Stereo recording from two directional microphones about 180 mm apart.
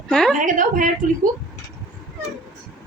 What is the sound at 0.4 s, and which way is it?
Speech, 50° right (ahead or behind).